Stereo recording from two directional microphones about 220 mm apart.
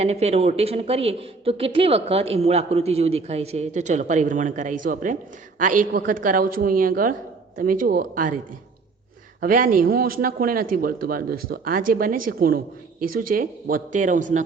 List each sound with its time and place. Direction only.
0.0 s speech: 30° right (ahead or behind)
9.4 s speech: 40° right (ahead or behind)